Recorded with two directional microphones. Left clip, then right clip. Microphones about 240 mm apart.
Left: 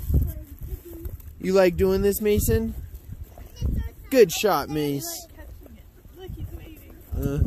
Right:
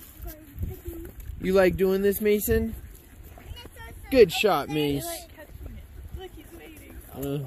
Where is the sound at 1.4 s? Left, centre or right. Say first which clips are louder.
Left 2 dB; centre.